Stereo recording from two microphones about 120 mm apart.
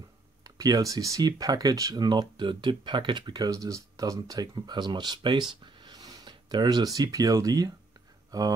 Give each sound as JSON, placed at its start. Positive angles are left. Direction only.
{"t": 0.4, "sound": "speech", "side_deg": -30}